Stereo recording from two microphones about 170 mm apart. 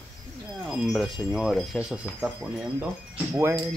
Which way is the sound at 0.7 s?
Centre (ahead or behind).